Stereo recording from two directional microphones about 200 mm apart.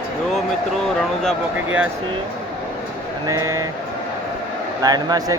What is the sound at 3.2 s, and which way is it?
Speech, 15° right (ahead or behind).